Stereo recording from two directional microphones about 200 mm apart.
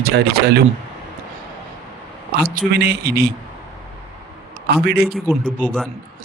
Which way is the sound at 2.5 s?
50° right (ahead or behind).